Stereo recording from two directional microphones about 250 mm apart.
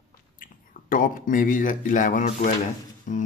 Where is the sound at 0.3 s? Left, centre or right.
Left.